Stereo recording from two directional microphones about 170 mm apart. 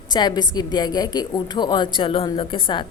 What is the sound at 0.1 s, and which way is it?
A woman's voice, 25° left (ahead or behind).